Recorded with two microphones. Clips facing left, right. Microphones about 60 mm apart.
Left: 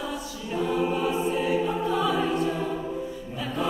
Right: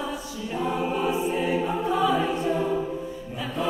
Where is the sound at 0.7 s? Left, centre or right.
Centre.